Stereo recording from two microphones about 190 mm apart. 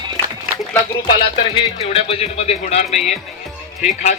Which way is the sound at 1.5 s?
30° left (ahead or behind).